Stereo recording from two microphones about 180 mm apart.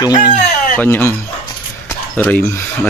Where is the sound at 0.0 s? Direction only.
20° left (ahead or behind).